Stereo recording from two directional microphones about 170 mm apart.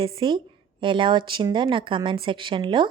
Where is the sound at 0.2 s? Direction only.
30° right (ahead or behind).